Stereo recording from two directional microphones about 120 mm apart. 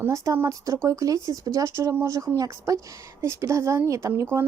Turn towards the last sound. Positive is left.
turn(degrees=-20)  # may be behind; listen again after turning